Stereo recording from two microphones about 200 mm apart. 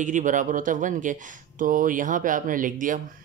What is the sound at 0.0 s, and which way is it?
Speech, 40° right (ahead or behind).